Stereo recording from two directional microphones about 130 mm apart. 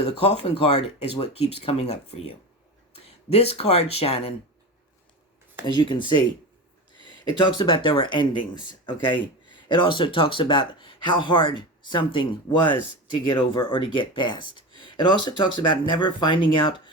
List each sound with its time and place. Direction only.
0.2 s speech: 50° left (ahead or behind)
5.6 s speech: 35° left (ahead or behind)
7.3 s speech: 35° left (ahead or behind)